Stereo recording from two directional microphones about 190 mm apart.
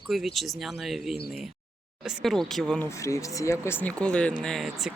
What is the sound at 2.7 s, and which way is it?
Speech, 10° left (ahead or behind).